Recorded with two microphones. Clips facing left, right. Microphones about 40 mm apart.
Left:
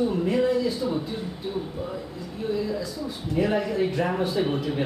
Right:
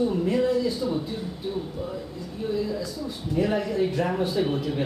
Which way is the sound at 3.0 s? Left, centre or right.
Centre.